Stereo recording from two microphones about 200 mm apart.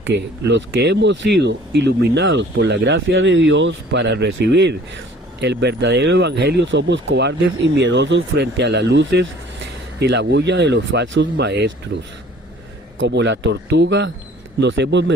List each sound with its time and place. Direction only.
0.0 s speech: 65° right (ahead or behind)
13.0 s speech: 65° right (ahead or behind)